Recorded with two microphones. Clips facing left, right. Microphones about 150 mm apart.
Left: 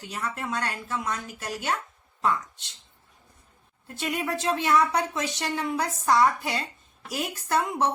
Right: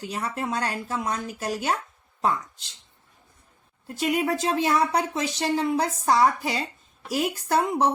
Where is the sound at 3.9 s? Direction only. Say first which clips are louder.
Right 5 dB; 35° right (ahead or behind).